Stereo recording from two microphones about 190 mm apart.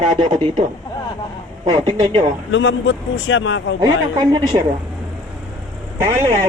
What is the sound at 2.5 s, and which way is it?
A man's voice, 70° left (ahead or behind).